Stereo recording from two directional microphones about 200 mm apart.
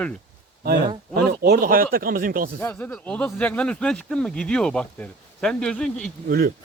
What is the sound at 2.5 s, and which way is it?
Speech, 5° left (ahead or behind).